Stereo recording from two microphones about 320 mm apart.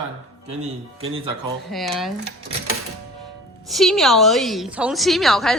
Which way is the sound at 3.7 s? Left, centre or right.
Centre.